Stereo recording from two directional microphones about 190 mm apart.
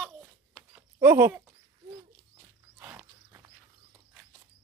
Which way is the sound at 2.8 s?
10° right (ahead or behind).